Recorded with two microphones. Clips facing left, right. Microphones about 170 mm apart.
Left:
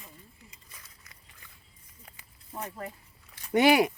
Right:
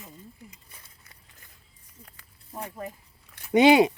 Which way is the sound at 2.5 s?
10° right (ahead or behind).